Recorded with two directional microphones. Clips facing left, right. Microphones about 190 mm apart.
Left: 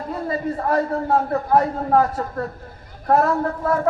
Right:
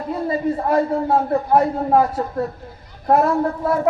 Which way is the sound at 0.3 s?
15° right (ahead or behind).